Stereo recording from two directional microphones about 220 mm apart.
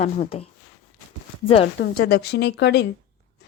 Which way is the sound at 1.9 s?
45° left (ahead or behind).